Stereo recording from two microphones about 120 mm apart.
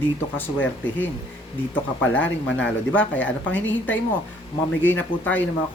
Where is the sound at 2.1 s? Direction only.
10° left (ahead or behind).